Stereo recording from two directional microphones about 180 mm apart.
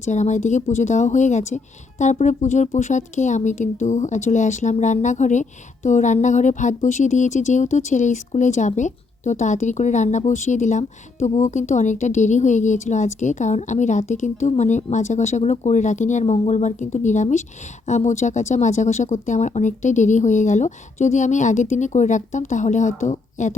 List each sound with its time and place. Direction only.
0.0 s speech: 40° left (ahead or behind)